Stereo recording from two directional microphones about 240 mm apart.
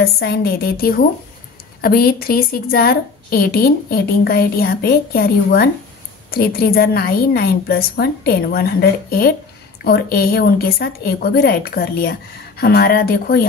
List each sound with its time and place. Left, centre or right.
0.0 s a woman's voice: left
9.8 s a woman's voice: left